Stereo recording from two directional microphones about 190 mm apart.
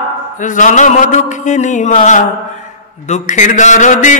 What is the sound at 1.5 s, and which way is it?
Mantra, 40° left (ahead or behind).